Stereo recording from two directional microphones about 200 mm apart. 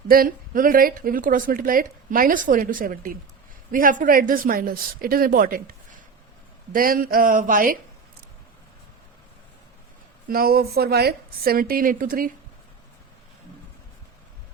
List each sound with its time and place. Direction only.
0.1 s speech: 45° right (ahead or behind)
10.2 s speech: 50° right (ahead or behind)